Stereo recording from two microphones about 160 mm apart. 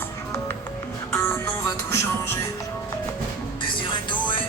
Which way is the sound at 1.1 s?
15° left (ahead or behind).